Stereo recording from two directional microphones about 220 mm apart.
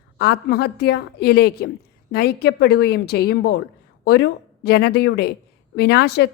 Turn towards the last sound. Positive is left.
turn(degrees=45)  # may be behind; listen again after turning